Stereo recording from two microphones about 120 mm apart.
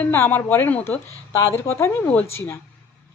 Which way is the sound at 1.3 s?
25° left (ahead or behind).